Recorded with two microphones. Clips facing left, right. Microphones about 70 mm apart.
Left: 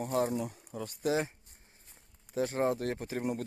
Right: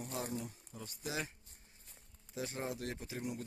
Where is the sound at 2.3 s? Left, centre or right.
Left.